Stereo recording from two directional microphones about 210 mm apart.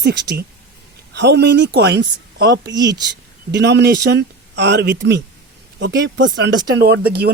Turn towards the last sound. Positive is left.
turn(degrees=-50)  # may be behind; listen again after turning